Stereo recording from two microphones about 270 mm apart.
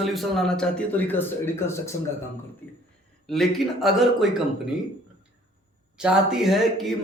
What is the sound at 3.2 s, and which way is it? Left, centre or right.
A man's voice, centre.